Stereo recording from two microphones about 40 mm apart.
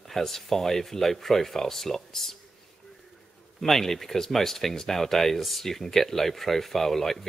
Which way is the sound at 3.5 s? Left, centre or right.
Centre.